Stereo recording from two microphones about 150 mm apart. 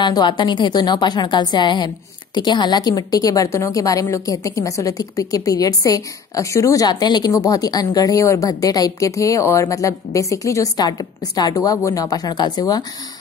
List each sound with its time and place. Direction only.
0.0 s a woman's voice: 30° left (ahead or behind)